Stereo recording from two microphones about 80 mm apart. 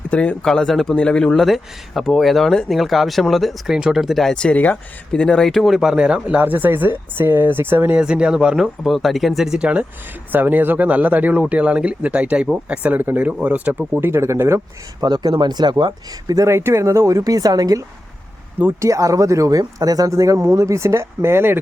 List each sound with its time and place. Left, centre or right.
0.1 s speech: centre; by 7.9 s right
7.9 s speech: centre; by 14.6 s right
15.0 s speech: right
16.5 s speech: right